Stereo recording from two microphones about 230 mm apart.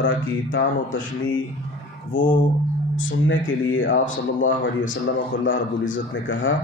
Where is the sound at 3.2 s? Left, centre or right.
Left.